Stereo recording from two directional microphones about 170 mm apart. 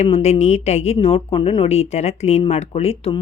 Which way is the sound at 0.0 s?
40° left (ahead or behind).